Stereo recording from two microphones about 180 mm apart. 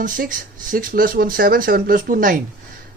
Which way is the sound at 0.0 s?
50° right (ahead or behind).